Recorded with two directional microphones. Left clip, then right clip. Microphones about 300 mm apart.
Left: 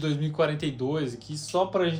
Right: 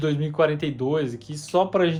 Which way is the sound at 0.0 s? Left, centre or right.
Right.